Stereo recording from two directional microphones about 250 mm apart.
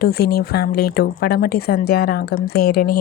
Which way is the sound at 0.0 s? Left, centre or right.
Left.